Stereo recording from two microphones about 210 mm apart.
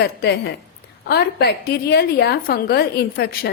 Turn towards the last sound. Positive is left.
turn(degrees=45)  # may be behind; listen again after turning